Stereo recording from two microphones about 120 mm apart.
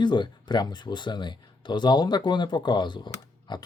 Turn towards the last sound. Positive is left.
turn(degrees=40)  # may be behind; listen again after turning